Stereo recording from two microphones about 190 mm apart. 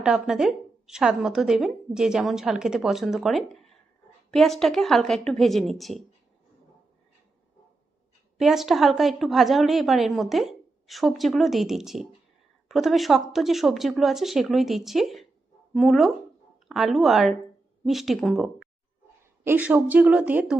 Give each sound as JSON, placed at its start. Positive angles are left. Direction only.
{"t": 0.0, "sound": "a woman's voice", "side_deg": -5}
{"t": 8.4, "sound": "a woman's voice", "side_deg": 0}
{"t": 19.5, "sound": "speech", "side_deg": -10}